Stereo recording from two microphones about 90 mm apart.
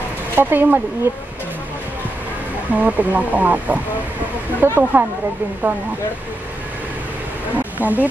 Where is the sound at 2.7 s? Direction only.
15° right (ahead or behind).